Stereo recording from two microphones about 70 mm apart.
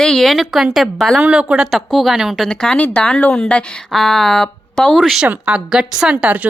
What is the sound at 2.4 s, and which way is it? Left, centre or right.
Speech, centre.